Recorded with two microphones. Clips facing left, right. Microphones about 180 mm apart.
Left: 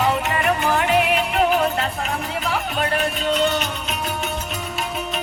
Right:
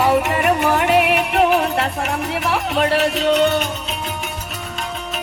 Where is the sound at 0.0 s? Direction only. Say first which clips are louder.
Right 4 dB; 65° right (ahead or behind).